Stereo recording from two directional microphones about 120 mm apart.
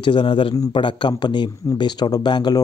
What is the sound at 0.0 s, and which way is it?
A man's voice, 40° left (ahead or behind).